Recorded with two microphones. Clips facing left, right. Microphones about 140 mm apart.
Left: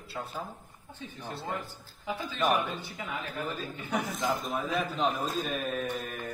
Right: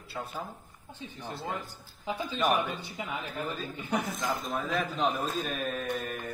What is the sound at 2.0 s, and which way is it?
Speech, 20° right (ahead or behind).